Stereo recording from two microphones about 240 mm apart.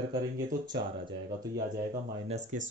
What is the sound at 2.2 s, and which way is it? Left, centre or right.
Speech, right.